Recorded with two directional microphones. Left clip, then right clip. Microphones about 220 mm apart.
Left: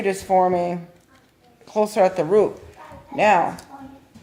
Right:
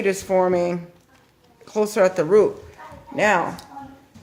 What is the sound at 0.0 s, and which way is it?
Speech, 25° right (ahead or behind).